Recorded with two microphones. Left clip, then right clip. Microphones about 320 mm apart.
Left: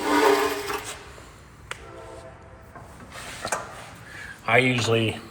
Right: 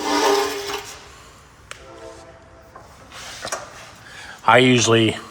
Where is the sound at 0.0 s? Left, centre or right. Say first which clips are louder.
Right 1 dB; right.